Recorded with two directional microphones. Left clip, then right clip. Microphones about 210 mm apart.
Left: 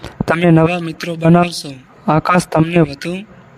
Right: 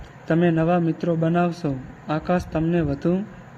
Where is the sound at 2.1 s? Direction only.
50° left (ahead or behind).